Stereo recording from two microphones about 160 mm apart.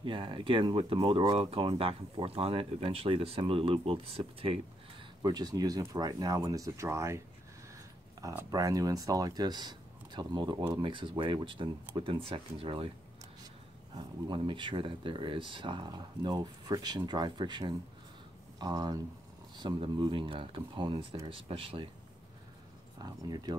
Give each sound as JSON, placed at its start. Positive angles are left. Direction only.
{"t": 0.0, "sound": "speech", "side_deg": -30}
{"t": 5.2, "sound": "speech", "side_deg": -25}
{"t": 8.2, "sound": "speech", "side_deg": -20}
{"t": 13.9, "sound": "speech", "side_deg": -30}
{"t": 22.9, "sound": "speech", "side_deg": -25}